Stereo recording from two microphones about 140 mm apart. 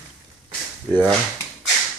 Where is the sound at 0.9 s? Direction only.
15° left (ahead or behind).